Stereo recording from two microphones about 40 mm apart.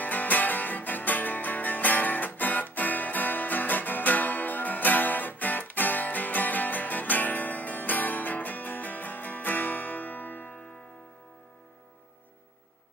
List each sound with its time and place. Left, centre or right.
0.0 s music: left